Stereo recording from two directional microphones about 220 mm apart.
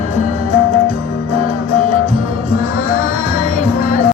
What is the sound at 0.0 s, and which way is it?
Music, 30° right (ahead or behind).